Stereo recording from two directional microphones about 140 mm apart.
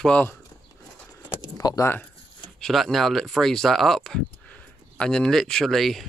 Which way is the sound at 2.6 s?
Centre (ahead or behind).